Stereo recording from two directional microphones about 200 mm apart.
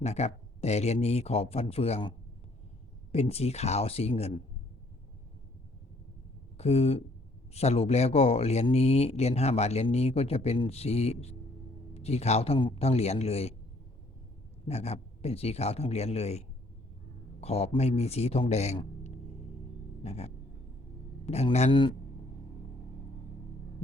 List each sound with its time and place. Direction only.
0.0 s speech: 35° left (ahead or behind)
6.6 s speech: 30° left (ahead or behind)
14.7 s a man's voice: 30° left (ahead or behind)